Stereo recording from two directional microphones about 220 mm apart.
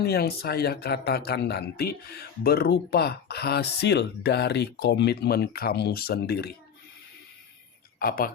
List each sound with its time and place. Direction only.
0.0 s speech: 45° left (ahead or behind)
7.9 s speech: 40° left (ahead or behind)